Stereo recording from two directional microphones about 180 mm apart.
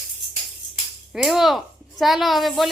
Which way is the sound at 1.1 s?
Centre (ahead or behind).